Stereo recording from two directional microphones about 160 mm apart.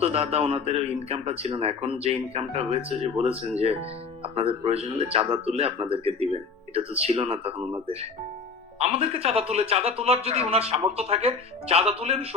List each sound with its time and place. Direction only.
0.0 s speech: 40° right (ahead or behind)